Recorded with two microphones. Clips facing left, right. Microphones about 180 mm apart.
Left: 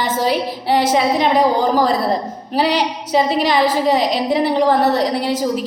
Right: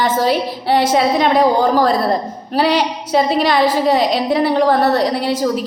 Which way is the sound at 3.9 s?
15° left (ahead or behind).